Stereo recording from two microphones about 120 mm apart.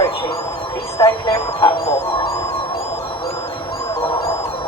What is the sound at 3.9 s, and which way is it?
Music, 45° left (ahead or behind).